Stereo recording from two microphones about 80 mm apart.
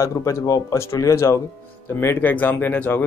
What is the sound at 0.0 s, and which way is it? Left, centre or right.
Speech, left.